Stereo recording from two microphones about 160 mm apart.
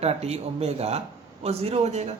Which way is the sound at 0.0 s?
40° right (ahead or behind).